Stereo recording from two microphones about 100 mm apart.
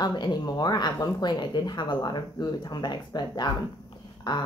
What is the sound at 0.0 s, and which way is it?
A woman's voice, 45° left (ahead or behind).